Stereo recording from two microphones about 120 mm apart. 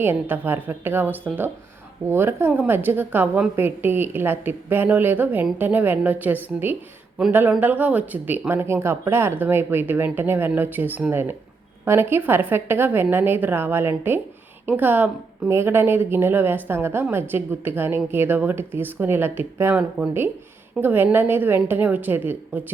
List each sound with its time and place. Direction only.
0.0 s a woman's voice: 15° right (ahead or behind)